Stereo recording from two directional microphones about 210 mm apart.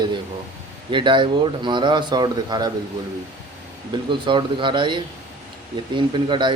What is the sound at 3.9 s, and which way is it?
Speech, 20° right (ahead or behind).